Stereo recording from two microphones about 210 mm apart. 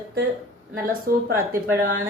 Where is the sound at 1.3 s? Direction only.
10° right (ahead or behind).